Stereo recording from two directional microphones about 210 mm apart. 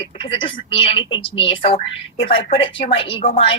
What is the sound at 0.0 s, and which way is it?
A woman's voice, 25° left (ahead or behind).